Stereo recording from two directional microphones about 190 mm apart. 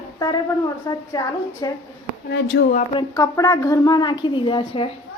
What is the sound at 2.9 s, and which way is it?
Speech, 15° left (ahead or behind).